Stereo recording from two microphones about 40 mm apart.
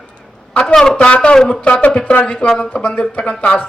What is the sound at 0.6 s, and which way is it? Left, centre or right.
Speech, centre.